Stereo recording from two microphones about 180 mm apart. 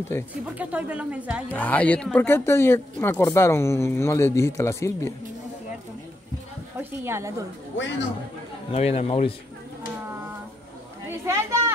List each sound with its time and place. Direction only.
0.1 s speech: 15° left (ahead or behind)
0.6 s speech: 10° right (ahead or behind)
1.5 s speech: 10° left (ahead or behind)
7.1 s speech: 15° right (ahead or behind)
7.7 s a man's voice: 90° left
8.7 s speech: 35° left (ahead or behind)
11.1 s a sound: 15° right (ahead or behind)